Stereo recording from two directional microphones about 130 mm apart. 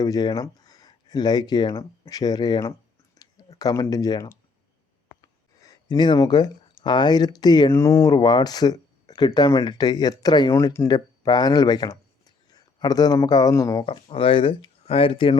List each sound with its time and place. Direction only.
0.0 s speech: 30° left (ahead or behind)
5.5 s speech: 25° left (ahead or behind)
7.7 s speech: 25° left (ahead or behind)
13.8 s speech: 45° left (ahead or behind)